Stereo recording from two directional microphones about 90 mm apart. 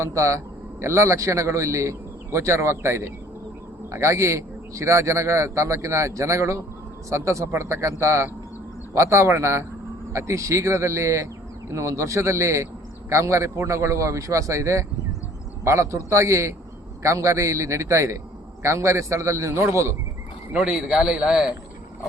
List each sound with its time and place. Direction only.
0.0 s a man's voice: 35° right (ahead or behind)
20.5 s a man's voice: 10° right (ahead or behind)